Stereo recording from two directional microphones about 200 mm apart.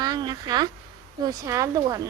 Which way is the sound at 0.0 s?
20° right (ahead or behind).